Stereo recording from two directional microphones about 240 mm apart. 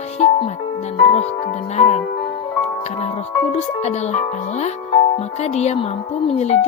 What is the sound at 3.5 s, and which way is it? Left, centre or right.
Speech, left.